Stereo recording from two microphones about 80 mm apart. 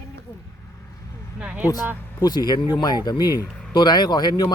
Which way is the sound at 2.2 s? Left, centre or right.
Left.